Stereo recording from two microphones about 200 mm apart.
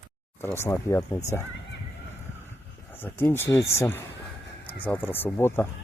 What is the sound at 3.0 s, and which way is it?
Speech, 10° left (ahead or behind).